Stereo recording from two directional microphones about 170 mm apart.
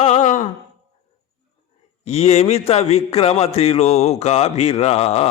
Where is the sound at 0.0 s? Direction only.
45° left (ahead or behind).